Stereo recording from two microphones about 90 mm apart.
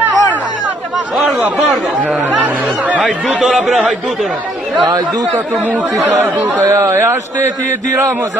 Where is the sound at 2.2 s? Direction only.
20° right (ahead or behind).